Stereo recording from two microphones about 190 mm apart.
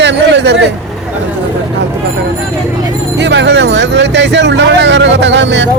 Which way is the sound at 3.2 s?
65° right (ahead or behind).